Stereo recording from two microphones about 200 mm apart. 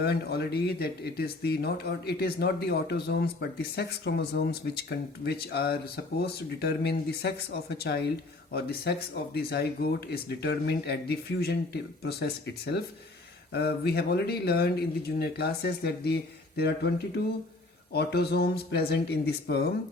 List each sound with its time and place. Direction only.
0.0 s speech: 55° left (ahead or behind)
17.9 s speech: 55° left (ahead or behind)